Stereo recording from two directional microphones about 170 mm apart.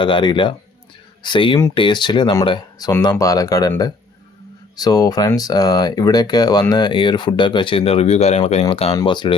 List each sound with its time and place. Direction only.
0.0 s speech: 30° left (ahead or behind)
4.8 s speech: 20° left (ahead or behind)